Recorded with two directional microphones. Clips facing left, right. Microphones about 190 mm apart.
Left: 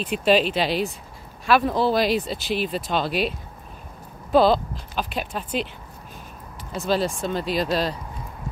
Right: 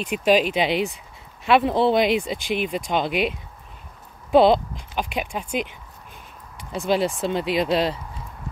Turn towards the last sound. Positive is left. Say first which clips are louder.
# right 2 dB
turn(degrees=-25)  # may be behind; listen again after turning